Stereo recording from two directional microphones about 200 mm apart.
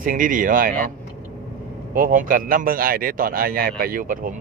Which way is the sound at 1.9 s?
40° right (ahead or behind).